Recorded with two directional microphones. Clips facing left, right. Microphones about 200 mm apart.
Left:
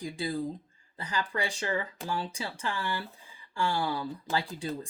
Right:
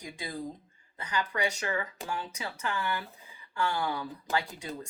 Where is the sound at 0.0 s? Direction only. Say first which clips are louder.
Left 6 dB; 30° left (ahead or behind).